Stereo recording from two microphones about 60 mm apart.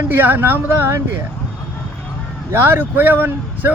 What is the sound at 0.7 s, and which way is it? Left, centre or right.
Speech, right.